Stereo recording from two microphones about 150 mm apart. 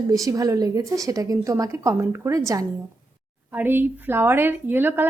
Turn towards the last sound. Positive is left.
turn(degrees=-15)  # may be behind; listen again after turning